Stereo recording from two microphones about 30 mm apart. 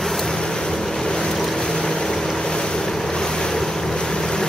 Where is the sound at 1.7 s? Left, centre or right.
Left.